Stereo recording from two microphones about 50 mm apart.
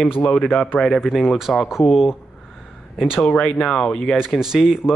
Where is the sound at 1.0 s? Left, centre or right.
Centre.